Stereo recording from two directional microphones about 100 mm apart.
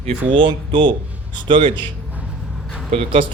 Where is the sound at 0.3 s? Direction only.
60° right (ahead or behind).